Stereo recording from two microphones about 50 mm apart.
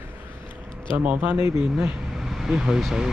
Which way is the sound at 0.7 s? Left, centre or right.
Right.